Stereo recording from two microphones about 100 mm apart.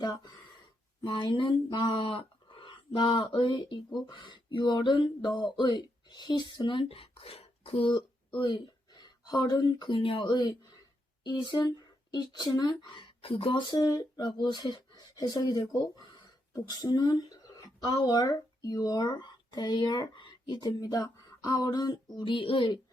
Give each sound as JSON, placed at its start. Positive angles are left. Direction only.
{"t": 0.0, "sound": "speech", "side_deg": 40}
{"t": 1.0, "sound": "speech", "side_deg": 55}
{"t": 9.9, "sound": "speech", "side_deg": 60}